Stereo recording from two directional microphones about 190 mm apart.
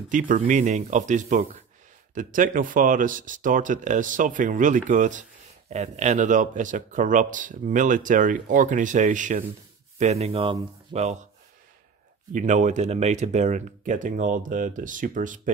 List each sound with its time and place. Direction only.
0.1 s speech: 45° right (ahead or behind)
12.3 s speech: 40° right (ahead or behind)